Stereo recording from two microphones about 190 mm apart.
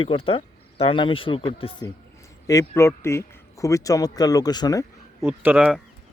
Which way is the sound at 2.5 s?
15° left (ahead or behind).